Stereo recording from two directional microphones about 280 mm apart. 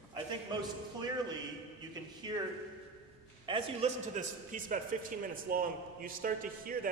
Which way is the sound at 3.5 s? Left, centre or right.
Right.